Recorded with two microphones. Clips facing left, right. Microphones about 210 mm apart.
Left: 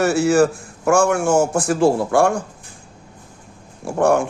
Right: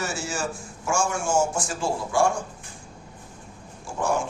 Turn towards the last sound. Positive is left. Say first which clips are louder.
# left 9 dB
turn(degrees=65)  # may be behind; listen again after turning